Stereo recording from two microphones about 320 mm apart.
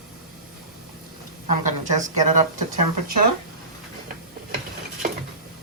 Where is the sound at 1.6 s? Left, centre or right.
Right.